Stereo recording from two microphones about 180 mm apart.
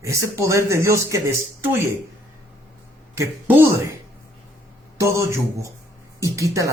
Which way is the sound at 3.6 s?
15° right (ahead or behind).